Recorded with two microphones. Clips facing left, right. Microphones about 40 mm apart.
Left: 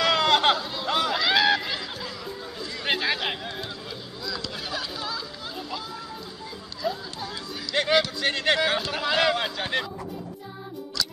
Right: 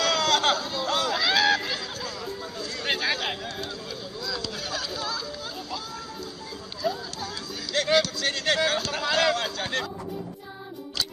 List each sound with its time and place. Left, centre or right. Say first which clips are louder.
0.0 s a sound: left 2 dB; centre
4.4 s music: even; centre
6.8 s music: right 1 dB; centre